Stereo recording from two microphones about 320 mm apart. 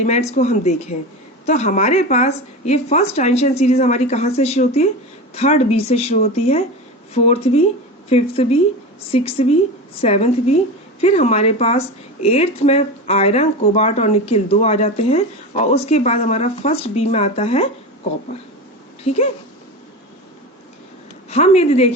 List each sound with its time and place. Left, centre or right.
0.0 s a woman's voice: left
19.0 s speech: centre
21.2 s speech: centre